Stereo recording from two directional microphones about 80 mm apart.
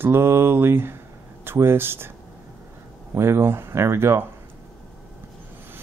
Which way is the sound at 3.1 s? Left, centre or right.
Right.